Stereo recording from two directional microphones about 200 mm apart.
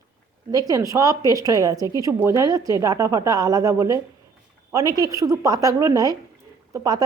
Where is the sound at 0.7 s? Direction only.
15° right (ahead or behind).